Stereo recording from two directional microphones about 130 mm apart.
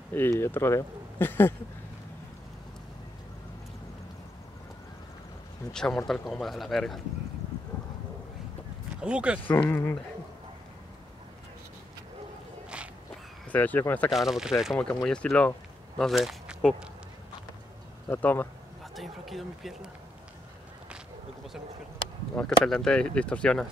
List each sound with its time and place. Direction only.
0.1 s speech: 20° left (ahead or behind)
5.7 s speech: 5° left (ahead or behind)
9.0 s speech: 10° right (ahead or behind)
9.5 s speech: 15° left (ahead or behind)
12.6 s a sound: 10° right (ahead or behind)
13.5 s speech: 15° left (ahead or behind)
14.1 s speech: 5° right (ahead or behind)
18.1 s speech: 15° left (ahead or behind)
18.9 s speech: centre (ahead or behind)
22.3 s speech: 5° left (ahead or behind)